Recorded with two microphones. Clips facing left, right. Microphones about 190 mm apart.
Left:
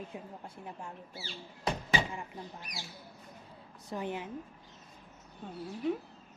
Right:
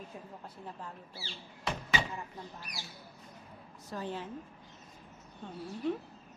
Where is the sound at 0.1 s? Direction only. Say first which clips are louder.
Left 2 dB; 15° left (ahead or behind).